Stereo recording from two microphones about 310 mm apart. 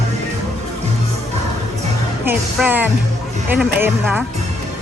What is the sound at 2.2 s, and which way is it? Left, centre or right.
Speech, centre.